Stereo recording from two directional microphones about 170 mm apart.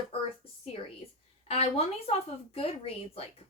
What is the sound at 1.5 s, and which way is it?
A woman's voice, 35° left (ahead or behind).